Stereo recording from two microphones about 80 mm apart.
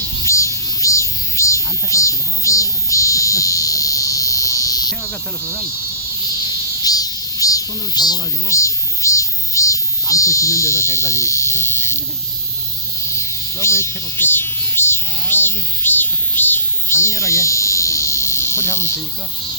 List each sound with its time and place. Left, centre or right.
0.2 s a sound: left
6.3 s cricket: left
8.4 s music: left
13.1 s cricket: left